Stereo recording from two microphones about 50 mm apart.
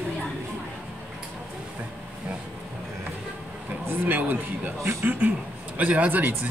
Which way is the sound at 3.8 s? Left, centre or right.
Right.